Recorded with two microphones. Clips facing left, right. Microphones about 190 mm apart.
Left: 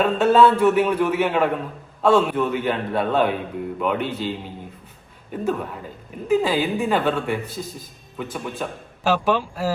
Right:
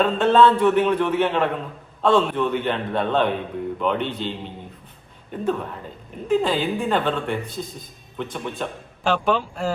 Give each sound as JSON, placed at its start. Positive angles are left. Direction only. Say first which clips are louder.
{"t": 0.0, "sound": "a man's voice", "louder": "left 1 dB", "side_deg": 5}